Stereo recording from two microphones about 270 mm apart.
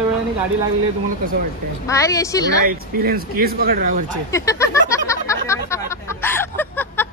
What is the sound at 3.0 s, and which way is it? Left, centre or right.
Speech, right.